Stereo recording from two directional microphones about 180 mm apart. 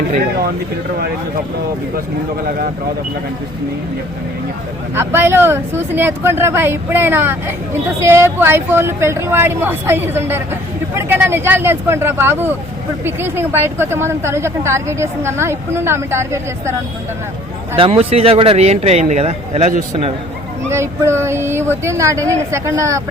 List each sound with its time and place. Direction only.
4.9 s speech: 15° right (ahead or behind)
17.7 s speech: 30° right (ahead or behind)
20.7 s speech: 15° right (ahead or behind)